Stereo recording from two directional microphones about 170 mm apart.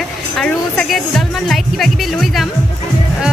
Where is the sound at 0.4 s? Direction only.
Centre (ahead or behind).